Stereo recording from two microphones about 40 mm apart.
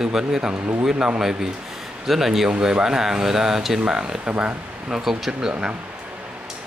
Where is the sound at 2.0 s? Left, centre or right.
Centre.